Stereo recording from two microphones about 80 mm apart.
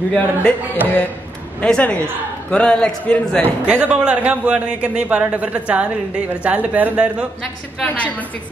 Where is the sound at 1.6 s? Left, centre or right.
Centre.